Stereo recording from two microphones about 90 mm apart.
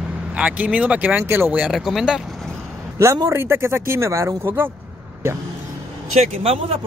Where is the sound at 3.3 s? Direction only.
30° right (ahead or behind).